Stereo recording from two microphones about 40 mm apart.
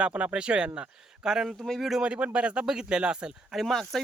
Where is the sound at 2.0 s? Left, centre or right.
Right.